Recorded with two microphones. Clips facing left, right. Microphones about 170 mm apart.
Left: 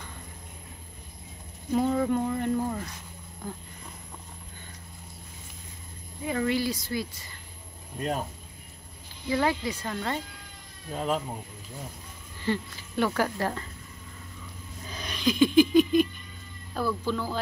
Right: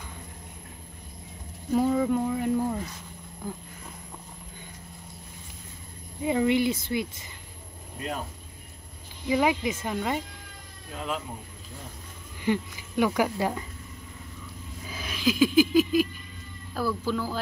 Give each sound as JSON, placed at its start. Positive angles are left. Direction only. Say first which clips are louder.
{"t": 1.7, "sound": "speech", "louder": "right 1 dB", "side_deg": -5}
{"t": 6.2, "sound": "speech", "louder": "right 4 dB", "side_deg": -20}
{"t": 9.3, "sound": "speech", "louder": "right 2 dB", "side_deg": -15}
{"t": 10.9, "sound": "speech", "louder": "left 4 dB", "side_deg": 35}
{"t": 12.4, "sound": "speech", "louder": "right 3 dB", "side_deg": -15}
{"t": 14.9, "sound": "a sound", "louder": "right 1 dB", "side_deg": -5}
{"t": 16.7, "sound": "speech", "louder": "right 1 dB", "side_deg": -5}